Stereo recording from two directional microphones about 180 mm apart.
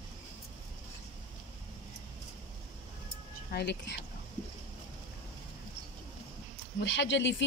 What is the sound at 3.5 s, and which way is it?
Speech, 70° left (ahead or behind).